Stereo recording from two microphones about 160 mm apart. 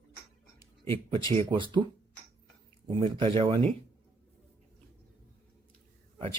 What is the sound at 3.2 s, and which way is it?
Speech, 35° right (ahead or behind).